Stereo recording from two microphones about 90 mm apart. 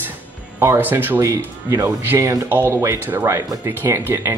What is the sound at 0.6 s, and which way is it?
Speech, 25° right (ahead or behind).